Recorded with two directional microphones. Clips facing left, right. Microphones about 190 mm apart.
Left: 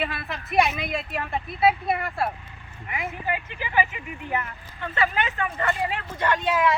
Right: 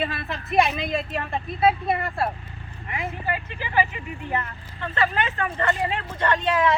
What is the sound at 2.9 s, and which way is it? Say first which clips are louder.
Speech: even; 15° left (ahead or behind).